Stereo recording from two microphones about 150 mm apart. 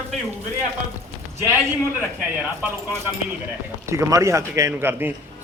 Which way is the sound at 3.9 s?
20° right (ahead or behind).